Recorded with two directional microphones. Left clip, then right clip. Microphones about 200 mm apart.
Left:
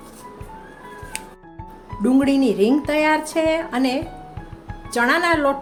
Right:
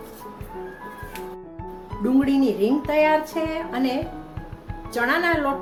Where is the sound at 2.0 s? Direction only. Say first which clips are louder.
Left 3 dB; 35° left (ahead or behind).